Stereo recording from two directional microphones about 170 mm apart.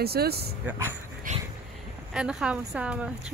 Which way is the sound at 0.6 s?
10° right (ahead or behind).